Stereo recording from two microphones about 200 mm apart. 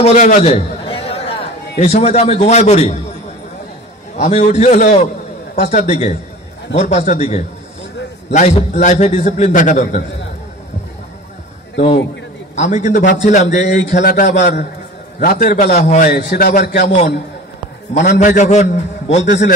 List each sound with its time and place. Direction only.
0.0 s a man's voice: 35° left (ahead or behind)
4.2 s a man's voice: 35° left (ahead or behind)
12.5 s a man's voice: 35° left (ahead or behind)
14.4 s a man's voice: 55° left (ahead or behind)
15.1 s a man's voice: 40° left (ahead or behind)
18.2 s a man's voice: 40° left (ahead or behind)